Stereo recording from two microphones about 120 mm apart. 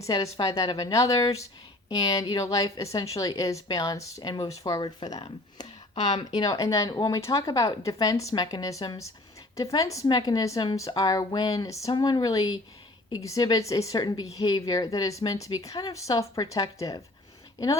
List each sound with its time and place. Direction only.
0.3 s a woman's voice: 35° left (ahead or behind)